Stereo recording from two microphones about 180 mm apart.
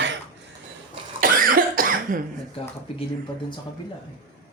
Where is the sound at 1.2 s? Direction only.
50° right (ahead or behind).